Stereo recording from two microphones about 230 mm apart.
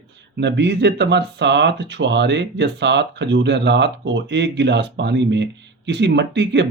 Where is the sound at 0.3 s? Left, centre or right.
Right.